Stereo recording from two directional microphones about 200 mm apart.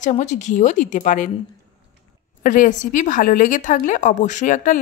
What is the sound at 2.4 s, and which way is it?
A woman's voice, 40° left (ahead or behind).